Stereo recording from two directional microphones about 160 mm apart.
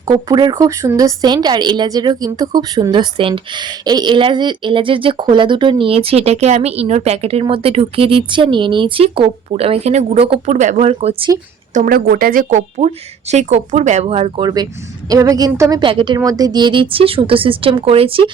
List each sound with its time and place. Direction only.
0.3 s speech: 25° right (ahead or behind)
11.7 s speech: 60° right (ahead or behind); by 14.4 s 40° right (ahead or behind)
14.4 s a woman's voice: 25° right (ahead or behind)